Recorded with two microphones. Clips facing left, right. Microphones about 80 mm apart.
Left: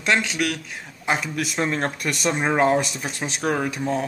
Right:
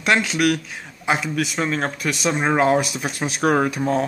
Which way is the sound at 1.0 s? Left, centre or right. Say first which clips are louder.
Right 3 dB; centre.